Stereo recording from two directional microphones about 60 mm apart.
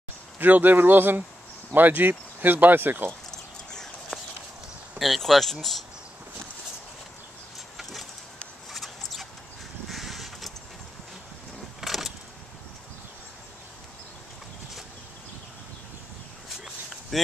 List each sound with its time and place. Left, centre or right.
0.4 s speech: right
4.1 s clip-clop: centre
4.9 s speech: centre
7.7 s vehicle: centre
8.7 s mouse: centre
9.8 s vehicle: centre
11.8 s vehicle: centre
17.1 s a sound: centre